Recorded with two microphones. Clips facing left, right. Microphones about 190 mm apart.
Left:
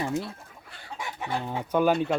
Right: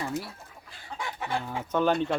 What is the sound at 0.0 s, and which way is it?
Speech, 20° left (ahead or behind).